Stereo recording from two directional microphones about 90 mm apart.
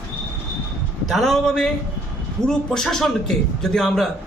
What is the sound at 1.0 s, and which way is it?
A man's voice, centre (ahead or behind).